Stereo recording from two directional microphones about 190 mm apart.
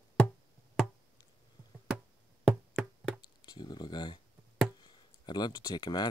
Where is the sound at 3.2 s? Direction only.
20° left (ahead or behind).